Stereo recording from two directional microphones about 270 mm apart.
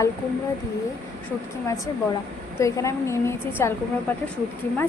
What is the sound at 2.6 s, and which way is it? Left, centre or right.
Speech, centre.